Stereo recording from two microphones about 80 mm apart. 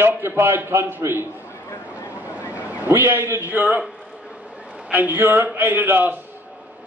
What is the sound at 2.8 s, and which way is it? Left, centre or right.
A man's voice, right.